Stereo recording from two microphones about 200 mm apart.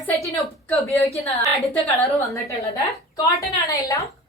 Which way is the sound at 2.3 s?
15° left (ahead or behind).